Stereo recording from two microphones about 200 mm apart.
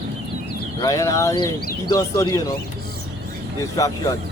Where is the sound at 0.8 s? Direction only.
15° left (ahead or behind).